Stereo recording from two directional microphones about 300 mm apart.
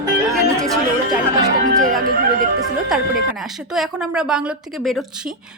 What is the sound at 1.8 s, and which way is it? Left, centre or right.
Music, right.